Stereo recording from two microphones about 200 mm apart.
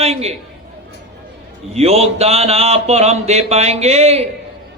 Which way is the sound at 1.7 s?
30° right (ahead or behind).